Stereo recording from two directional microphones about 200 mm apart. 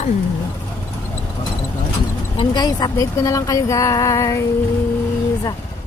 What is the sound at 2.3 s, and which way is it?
Speech, 20° left (ahead or behind).